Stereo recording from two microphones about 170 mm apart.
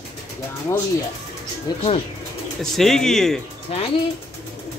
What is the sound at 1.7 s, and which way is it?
Speech, 25° left (ahead or behind).